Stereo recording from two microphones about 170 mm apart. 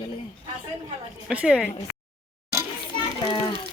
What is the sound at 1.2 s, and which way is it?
Speech, 5° right (ahead or behind).